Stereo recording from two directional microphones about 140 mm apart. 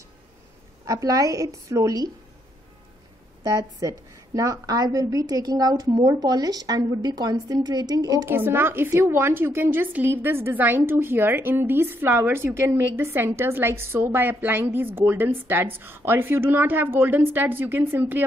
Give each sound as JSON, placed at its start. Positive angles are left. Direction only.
{"t": 0.8, "sound": "a woman's voice", "side_deg": -25}
{"t": 3.4, "sound": "a woman's voice", "side_deg": -20}
{"t": 8.3, "sound": "a woman's voice", "side_deg": -15}